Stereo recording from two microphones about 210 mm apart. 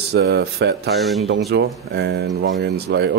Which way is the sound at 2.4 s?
65° right (ahead or behind).